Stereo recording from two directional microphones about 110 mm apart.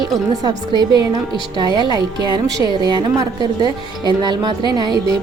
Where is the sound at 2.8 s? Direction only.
40° right (ahead or behind).